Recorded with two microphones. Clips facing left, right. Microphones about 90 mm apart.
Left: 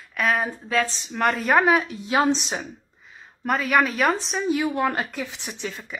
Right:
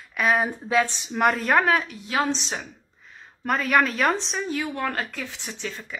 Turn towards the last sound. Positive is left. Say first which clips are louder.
# left 1 dB
turn(degrees=10)  # may be behind; listen again after turning